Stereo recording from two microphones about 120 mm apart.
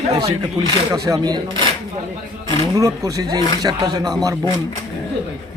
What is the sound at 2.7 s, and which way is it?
A man's voice, 30° right (ahead or behind).